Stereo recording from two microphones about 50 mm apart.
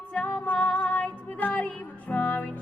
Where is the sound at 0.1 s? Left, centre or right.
Left.